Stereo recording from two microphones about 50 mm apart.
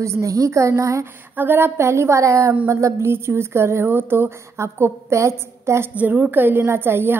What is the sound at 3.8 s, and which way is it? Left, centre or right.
Speech, right.